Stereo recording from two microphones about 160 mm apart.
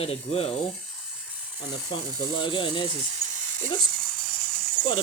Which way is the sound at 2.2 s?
30° left (ahead or behind).